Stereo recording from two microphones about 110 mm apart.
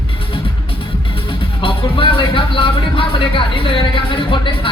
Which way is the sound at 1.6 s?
50° left (ahead or behind).